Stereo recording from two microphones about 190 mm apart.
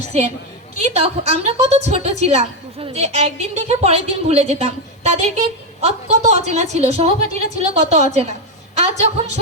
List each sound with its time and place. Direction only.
0.8 s a woman's voice: 35° right (ahead or behind)